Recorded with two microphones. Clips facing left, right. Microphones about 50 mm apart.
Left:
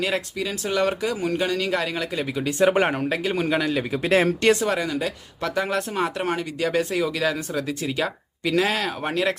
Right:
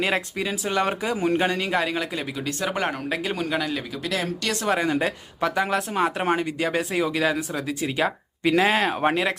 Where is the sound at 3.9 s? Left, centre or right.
Left.